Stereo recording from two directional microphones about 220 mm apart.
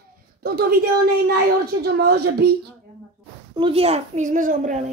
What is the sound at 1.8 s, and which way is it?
Speech, 45° right (ahead or behind).